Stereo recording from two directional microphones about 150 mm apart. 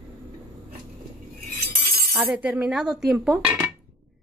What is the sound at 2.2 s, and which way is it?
Speech, 10° right (ahead or behind).